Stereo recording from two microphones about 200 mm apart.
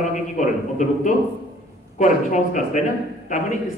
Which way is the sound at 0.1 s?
40° left (ahead or behind).